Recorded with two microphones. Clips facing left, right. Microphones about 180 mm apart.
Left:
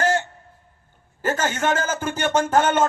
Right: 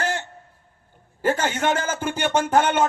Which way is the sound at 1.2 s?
15° right (ahead or behind).